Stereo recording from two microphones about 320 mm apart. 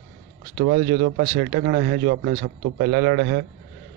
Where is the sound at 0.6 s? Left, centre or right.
Right.